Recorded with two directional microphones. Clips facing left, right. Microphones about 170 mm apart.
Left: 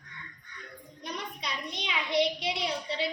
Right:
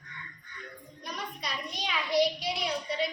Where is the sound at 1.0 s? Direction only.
20° left (ahead or behind).